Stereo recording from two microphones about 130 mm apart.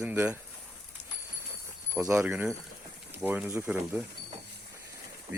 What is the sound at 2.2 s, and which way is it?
Speech, 15° right (ahead or behind).